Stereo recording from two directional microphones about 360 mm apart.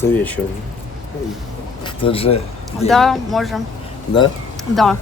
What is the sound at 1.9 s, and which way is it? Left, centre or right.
Speech, centre.